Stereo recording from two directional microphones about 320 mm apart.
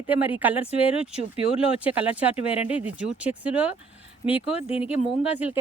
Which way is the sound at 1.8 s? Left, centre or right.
Centre.